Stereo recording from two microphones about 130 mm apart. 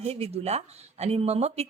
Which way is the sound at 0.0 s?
50° right (ahead or behind).